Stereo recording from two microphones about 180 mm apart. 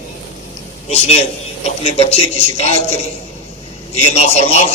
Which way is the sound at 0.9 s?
35° left (ahead or behind).